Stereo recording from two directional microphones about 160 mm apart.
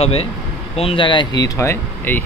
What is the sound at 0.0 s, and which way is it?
Speech, 40° left (ahead or behind).